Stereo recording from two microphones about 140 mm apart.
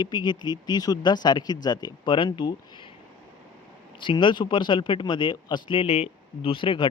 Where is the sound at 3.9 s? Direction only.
35° left (ahead or behind).